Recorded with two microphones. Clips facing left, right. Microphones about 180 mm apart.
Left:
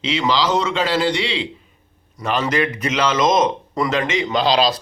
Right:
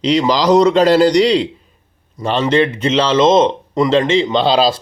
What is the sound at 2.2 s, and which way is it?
A man's voice, 30° right (ahead or behind).